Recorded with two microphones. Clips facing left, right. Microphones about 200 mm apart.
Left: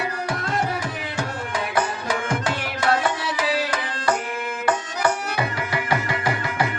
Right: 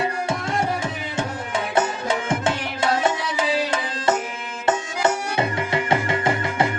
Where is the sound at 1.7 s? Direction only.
25° right (ahead or behind).